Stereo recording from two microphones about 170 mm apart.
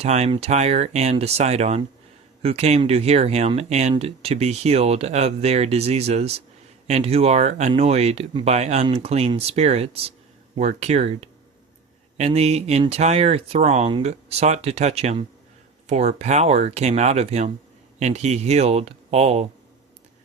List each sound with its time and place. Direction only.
0.0 s speech: 40° right (ahead or behind)